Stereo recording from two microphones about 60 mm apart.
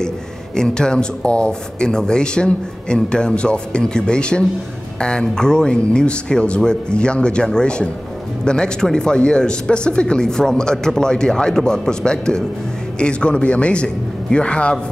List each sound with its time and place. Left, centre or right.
0.6 s speech: centre